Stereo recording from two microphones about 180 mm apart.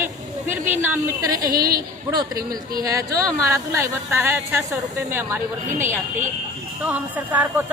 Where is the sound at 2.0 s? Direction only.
20° right (ahead or behind).